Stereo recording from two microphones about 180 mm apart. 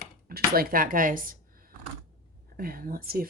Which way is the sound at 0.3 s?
55° right (ahead or behind).